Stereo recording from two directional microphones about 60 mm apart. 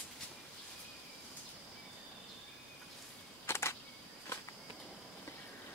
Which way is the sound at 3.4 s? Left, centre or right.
Left.